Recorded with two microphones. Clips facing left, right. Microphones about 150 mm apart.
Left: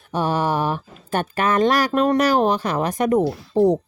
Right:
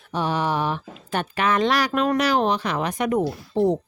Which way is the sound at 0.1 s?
45° left (ahead or behind).